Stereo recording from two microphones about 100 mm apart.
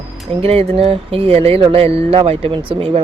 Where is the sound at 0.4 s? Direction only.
90° right.